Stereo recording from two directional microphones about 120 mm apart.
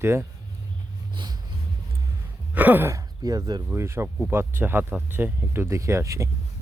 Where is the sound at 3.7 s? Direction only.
20° right (ahead or behind).